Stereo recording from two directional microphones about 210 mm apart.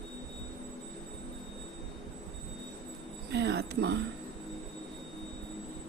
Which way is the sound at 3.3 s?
55° right (ahead or behind).